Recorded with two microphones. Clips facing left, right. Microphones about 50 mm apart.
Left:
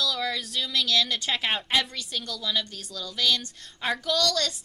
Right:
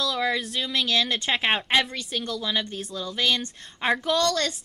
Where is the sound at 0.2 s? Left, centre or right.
Right.